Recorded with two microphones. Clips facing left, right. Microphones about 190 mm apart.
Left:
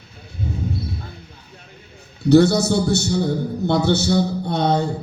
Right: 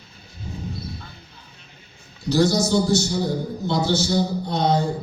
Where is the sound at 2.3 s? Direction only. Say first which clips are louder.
Left 5 dB; 60° left (ahead or behind).